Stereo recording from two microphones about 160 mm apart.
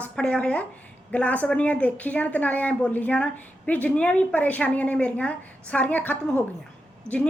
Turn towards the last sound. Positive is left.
turn(degrees=-15)  # may be behind; listen again after turning